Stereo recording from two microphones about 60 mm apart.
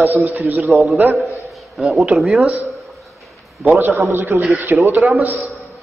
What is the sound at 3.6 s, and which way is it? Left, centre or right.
Speech, right.